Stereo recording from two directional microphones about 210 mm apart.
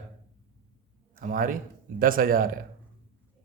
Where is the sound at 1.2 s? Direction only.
40° right (ahead or behind).